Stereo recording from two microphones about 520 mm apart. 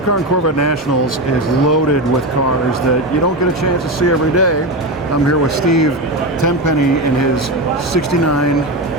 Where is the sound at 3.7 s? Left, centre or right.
Left.